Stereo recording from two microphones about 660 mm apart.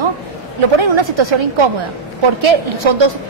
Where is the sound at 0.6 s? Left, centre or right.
Right.